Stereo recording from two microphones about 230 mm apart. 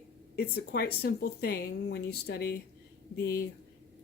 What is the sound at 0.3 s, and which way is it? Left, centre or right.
Speech, left.